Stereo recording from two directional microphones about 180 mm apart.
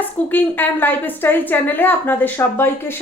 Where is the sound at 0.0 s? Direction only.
10° left (ahead or behind).